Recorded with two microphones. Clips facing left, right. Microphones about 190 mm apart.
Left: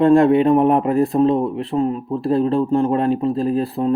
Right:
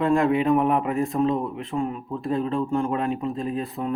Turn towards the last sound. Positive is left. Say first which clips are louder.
# left 8 dB
turn(degrees=35)  # may be behind; listen again after turning